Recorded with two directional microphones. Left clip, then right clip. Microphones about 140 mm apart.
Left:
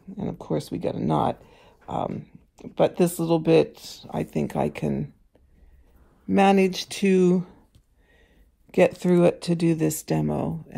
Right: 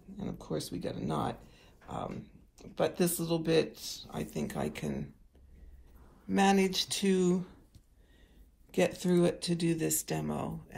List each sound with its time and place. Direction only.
0.2 s speech: 60° left (ahead or behind)
1.5 s a sound: 60° left (ahead or behind)
2.5 s speech: 65° left (ahead or behind)
6.3 s speech: 50° left (ahead or behind)
8.7 s speech: 55° left (ahead or behind)